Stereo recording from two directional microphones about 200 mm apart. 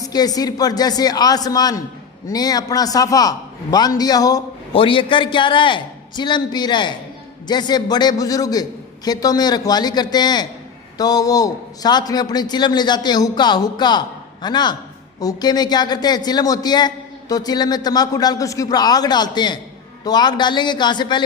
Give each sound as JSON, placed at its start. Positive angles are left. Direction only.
{"t": 0.0, "sound": "a man's voice", "side_deg": 20}